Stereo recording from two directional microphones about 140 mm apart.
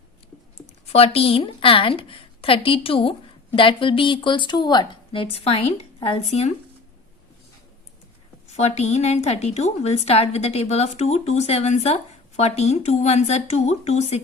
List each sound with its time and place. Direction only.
0.5 s speech: 45° left (ahead or behind)
8.5 s a woman's voice: 50° left (ahead or behind)